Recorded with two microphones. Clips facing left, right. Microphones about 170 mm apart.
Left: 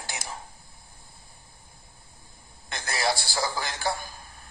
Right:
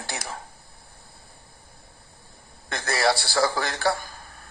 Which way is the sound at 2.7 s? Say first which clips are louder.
Right 5 dB; 60° right (ahead or behind).